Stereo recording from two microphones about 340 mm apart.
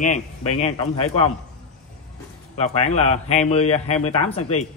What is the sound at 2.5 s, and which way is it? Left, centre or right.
A man's voice, centre.